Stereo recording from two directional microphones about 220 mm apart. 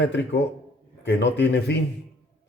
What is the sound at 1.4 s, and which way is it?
Speech, 50° left (ahead or behind).